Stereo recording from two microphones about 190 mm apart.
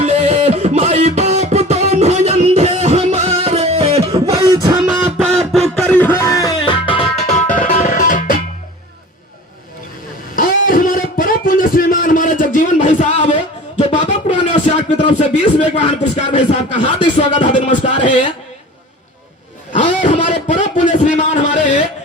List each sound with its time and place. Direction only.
0.0 s music: 35° right (ahead or behind)
4.5 s music: 15° right (ahead or behind)
5.0 s music: 5° right (ahead or behind); by 7.4 s 30° left (ahead or behind)
7.4 s music: 45° left (ahead or behind)
10.3 s a sound: 45° left (ahead or behind)
19.7 s a sound: 40° left (ahead or behind)